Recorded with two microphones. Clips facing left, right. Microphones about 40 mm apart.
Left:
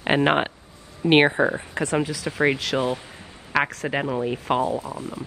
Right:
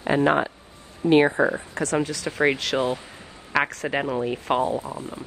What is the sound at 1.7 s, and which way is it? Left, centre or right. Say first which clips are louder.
Speech: left 1 dB; left.